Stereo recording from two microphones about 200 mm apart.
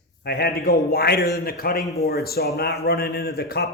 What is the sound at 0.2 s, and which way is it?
A man's voice, 50° left (ahead or behind).